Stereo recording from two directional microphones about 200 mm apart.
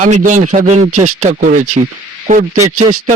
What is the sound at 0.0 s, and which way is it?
Speech, 40° right (ahead or behind).